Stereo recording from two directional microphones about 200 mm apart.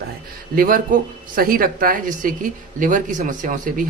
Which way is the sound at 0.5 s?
45° right (ahead or behind).